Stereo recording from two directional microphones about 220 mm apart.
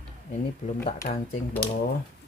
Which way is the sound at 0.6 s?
35° left (ahead or behind).